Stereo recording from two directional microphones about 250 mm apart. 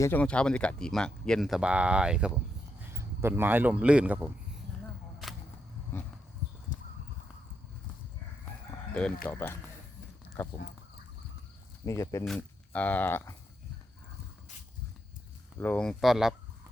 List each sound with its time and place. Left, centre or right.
0.0 s a man's voice: centre
6.7 s horse: left
8.9 s speech: centre
11.9 s speech: centre
15.5 s speech: centre